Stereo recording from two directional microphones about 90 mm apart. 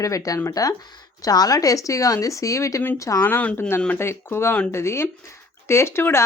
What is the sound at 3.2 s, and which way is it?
Speech, 20° left (ahead or behind).